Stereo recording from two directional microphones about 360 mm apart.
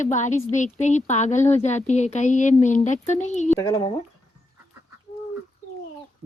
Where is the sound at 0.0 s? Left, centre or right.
Centre.